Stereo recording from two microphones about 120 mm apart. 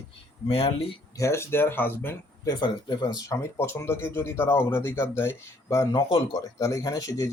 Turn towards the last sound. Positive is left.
turn(degrees=30)  # may be behind; listen again after turning